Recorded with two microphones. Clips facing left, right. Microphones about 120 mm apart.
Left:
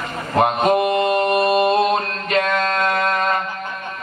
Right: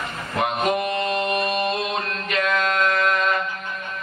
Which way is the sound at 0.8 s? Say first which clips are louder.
Left 7 dB; 15° left (ahead or behind).